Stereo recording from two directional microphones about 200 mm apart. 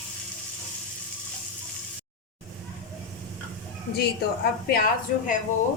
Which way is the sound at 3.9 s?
55° left (ahead or behind).